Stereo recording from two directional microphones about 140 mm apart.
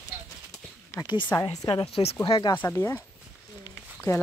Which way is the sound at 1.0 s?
35° left (ahead or behind).